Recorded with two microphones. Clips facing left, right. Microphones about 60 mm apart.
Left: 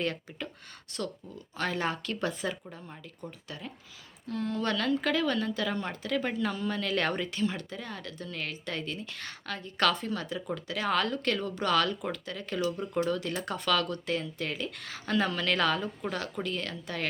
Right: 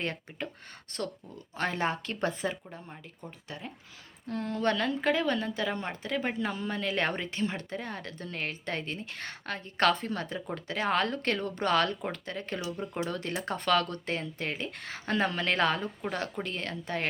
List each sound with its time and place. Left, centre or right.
0.0 s speech: right
4.3 s speech: right